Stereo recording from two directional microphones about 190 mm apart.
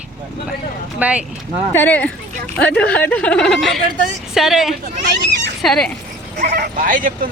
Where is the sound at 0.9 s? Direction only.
5° right (ahead or behind).